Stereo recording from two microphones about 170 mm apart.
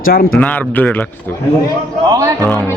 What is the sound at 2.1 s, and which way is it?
Speech, 20° right (ahead or behind).